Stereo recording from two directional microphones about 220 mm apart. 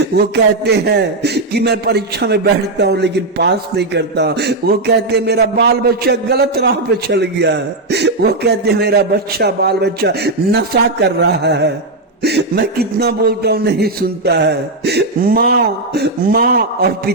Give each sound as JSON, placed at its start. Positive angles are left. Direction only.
{"t": 0.0, "sound": "a man's voice", "side_deg": -50}